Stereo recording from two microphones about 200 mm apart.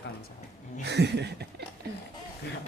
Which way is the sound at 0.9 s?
60° right (ahead or behind).